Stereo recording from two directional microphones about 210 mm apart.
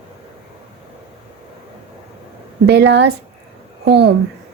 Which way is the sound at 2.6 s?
55° right (ahead or behind).